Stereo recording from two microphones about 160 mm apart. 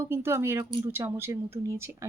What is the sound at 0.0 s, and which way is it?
Speech, 15° right (ahead or behind).